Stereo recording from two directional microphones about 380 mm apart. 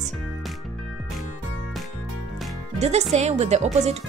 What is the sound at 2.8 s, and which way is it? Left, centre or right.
Speech, centre.